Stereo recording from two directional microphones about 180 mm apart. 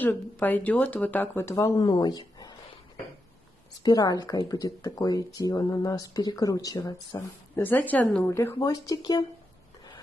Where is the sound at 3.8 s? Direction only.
20° left (ahead or behind).